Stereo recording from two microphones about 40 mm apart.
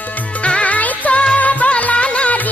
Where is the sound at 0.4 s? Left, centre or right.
Left.